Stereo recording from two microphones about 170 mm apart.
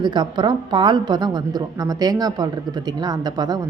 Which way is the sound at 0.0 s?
25° right (ahead or behind).